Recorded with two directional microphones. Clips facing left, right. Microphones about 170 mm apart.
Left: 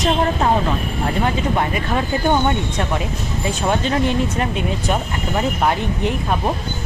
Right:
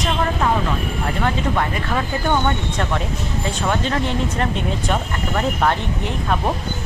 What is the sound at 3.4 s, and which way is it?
Speech, 15° left (ahead or behind).